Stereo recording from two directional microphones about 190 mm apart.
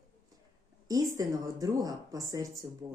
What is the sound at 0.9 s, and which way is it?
Speech, 20° right (ahead or behind).